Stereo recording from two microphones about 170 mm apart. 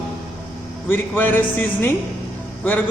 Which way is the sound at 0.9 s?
10° left (ahead or behind).